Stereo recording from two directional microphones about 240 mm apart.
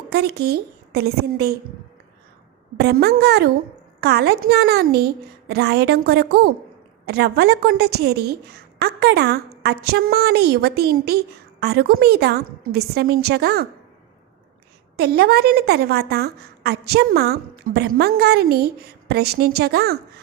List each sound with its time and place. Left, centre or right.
0.1 s a woman's voice: right
2.7 s a woman's voice: right
14.9 s a woman's voice: right